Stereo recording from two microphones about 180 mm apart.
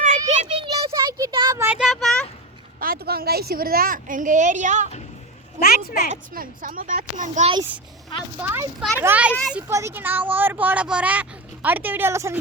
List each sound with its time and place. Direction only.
0.5 s a sound: 30° right (ahead or behind)
1.5 s a sound: 10° right (ahead or behind)
2.8 s a woman's voice: 55° right (ahead or behind)
5.5 s speech: 55° left (ahead or behind)
6.1 s a woman's voice: 50° right (ahead or behind)
8.4 s speech: 15° right (ahead or behind)